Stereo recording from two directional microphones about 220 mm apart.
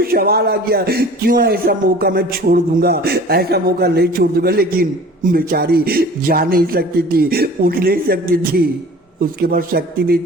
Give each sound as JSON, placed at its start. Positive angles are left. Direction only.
{"t": 0.0, "sound": "speech", "side_deg": -45}